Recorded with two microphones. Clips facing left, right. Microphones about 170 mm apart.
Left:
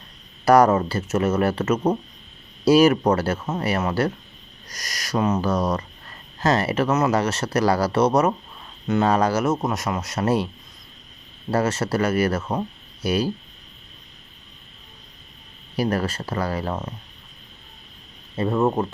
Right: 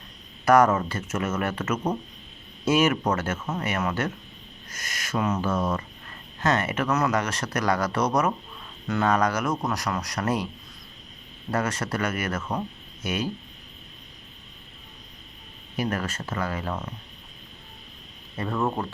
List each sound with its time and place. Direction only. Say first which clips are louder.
0.4 s speech: left 3 dB; 35° left (ahead or behind)
11.5 s speech: left 5 dB; 30° left (ahead or behind)
15.7 s speech: left 5 dB; 35° left (ahead or behind)
18.3 s speech: left 6 dB; 25° left (ahead or behind)